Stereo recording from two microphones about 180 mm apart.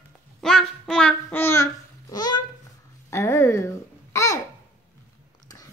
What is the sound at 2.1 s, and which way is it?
A child's voice, 20° left (ahead or behind).